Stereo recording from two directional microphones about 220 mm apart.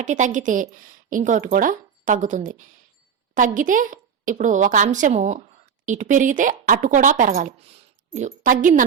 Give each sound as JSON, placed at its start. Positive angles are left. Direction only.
{"t": 0.0, "sound": "speech", "side_deg": -35}